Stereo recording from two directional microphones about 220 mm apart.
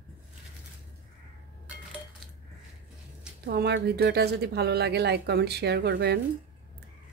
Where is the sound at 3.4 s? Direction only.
50° right (ahead or behind).